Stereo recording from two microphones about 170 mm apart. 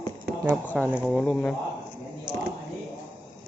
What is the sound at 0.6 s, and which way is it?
Speech, 10° left (ahead or behind).